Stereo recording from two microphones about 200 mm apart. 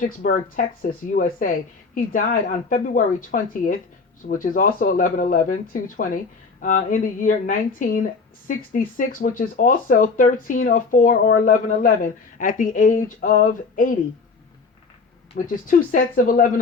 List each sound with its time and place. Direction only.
0.0 s speech: 45° left (ahead or behind)
15.4 s speech: 45° left (ahead or behind)